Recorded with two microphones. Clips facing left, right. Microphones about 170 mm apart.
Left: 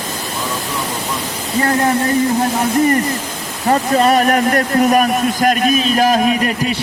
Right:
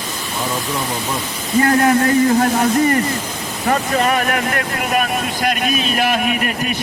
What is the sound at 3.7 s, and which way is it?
Speech, 35° left (ahead or behind).